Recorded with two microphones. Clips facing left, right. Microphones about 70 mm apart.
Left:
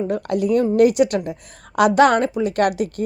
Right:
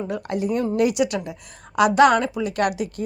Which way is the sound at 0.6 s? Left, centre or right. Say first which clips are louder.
Left 5 dB; left.